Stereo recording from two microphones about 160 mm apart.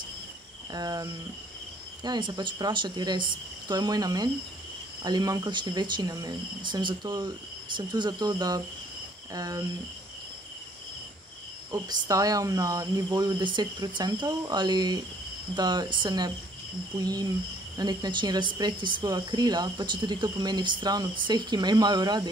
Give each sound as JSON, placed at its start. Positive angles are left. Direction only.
{"t": 0.7, "sound": "speech", "side_deg": -25}
{"t": 11.7, "sound": "speech", "side_deg": -20}